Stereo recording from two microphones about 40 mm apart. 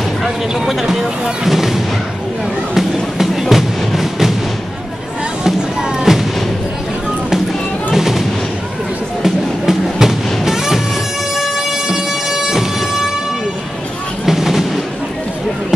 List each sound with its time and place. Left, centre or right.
0.2 s speech: centre
2.7 s music: centre
5.4 s music: centre
7.9 s artillery fire: centre
9.2 s music: centre
11.3 s bagpipes: centre
14.2 s a sound: centre